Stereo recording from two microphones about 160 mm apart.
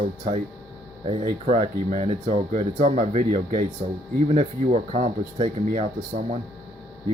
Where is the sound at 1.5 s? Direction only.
45° right (ahead or behind).